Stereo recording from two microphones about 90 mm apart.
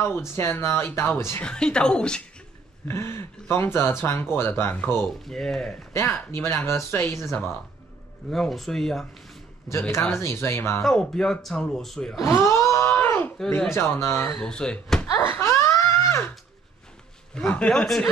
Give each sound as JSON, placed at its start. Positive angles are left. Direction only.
{"t": 0.4, "sound": "speech", "side_deg": 30}
{"t": 1.4, "sound": "speech", "side_deg": 10}
{"t": 2.9, "sound": "speech", "side_deg": 30}
{"t": 5.2, "sound": "speech", "side_deg": 5}
{"t": 5.9, "sound": "speech", "side_deg": 30}
{"t": 8.3, "sound": "speech", "side_deg": 5}
{"t": 9.7, "sound": "speech", "side_deg": 30}
{"t": 10.8, "sound": "speech", "side_deg": 5}
{"t": 12.2, "sound": "wail", "side_deg": 30}
{"t": 13.7, "sound": "speech", "side_deg": 30}
{"t": 14.4, "sound": "speech", "side_deg": 10}
{"t": 15.1, "sound": "a sound", "side_deg": 25}
{"t": 17.5, "sound": "speech", "side_deg": 10}